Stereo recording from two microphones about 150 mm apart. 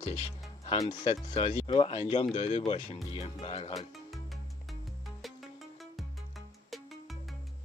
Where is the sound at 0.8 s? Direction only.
30° left (ahead or behind).